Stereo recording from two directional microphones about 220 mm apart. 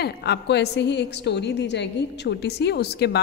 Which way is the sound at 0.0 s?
50° left (ahead or behind).